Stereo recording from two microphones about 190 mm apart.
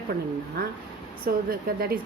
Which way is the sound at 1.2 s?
50° right (ahead or behind).